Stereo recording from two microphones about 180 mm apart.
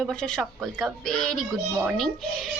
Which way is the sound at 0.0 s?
5° left (ahead or behind).